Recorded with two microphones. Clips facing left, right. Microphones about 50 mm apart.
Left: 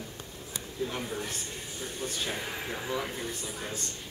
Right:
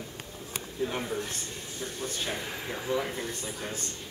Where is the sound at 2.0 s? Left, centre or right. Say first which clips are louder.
Even; centre.